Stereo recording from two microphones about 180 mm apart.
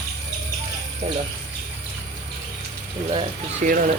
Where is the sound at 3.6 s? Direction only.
45° right (ahead or behind).